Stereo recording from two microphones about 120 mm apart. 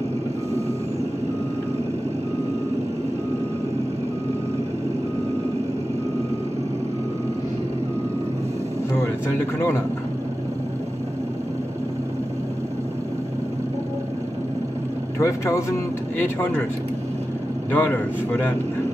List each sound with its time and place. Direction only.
15.1 s a man's voice: 25° left (ahead or behind)
17.6 s speech: 15° left (ahead or behind)